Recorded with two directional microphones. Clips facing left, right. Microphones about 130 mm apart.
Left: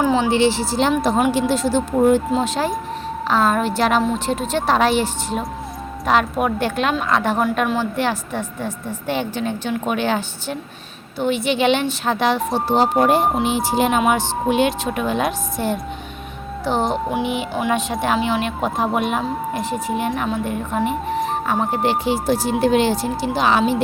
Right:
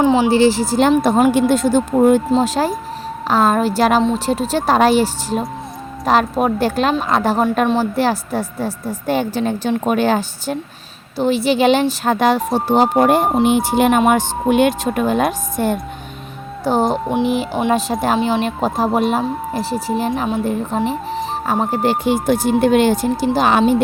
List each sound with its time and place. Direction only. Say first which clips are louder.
0.0 s music: right 4 dB; 20° right (ahead or behind)
0.3 s speech: right 4 dB; 40° right (ahead or behind)
2.3 s speech: right 4 dB; 40° right (ahead or behind); by 14.0 s 60° right (ahead or behind)
14.0 s speech: right 3 dB; 45° right (ahead or behind)